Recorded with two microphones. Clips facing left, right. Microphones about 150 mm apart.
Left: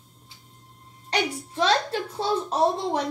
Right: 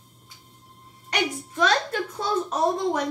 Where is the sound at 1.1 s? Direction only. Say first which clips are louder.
Even; 30° left (ahead or behind).